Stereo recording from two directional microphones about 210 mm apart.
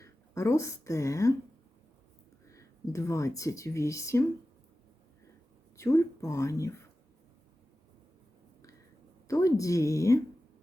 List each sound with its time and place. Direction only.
0.0 s a woman's voice: 15° left (ahead or behind)
2.5 s speech: 15° left (ahead or behind)
5.7 s speech: 15° left (ahead or behind)
9.2 s speech: 15° left (ahead or behind)